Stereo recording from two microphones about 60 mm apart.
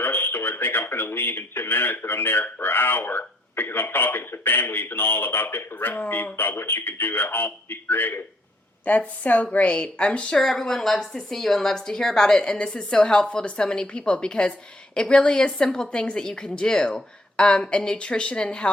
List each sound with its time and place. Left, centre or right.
0.0 s speech: left
8.8 s a woman's voice: left